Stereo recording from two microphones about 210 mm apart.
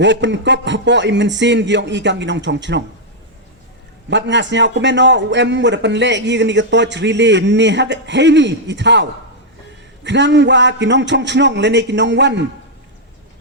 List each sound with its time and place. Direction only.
0.0 s a man's voice: 60° right (ahead or behind)
4.1 s a man's voice: 60° right (ahead or behind)